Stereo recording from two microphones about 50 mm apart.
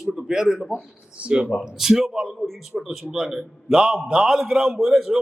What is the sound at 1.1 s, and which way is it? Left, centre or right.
A man's voice, right.